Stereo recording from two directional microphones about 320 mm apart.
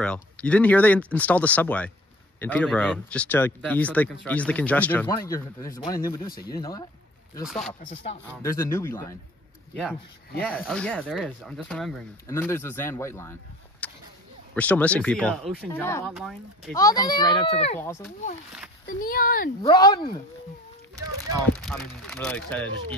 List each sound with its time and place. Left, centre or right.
0.0 s speech: centre
6.2 s speech: left
6.5 s speech: centre
7.4 s speech: centre
10.4 s speech: centre
16.7 s speech: centre
18.9 s speech: left
19.6 s speech: centre
21.5 s speech: centre